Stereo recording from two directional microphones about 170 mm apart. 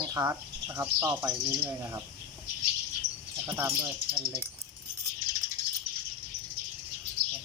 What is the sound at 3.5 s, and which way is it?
Speech, 15° right (ahead or behind).